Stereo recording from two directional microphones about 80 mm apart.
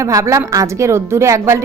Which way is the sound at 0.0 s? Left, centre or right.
Right.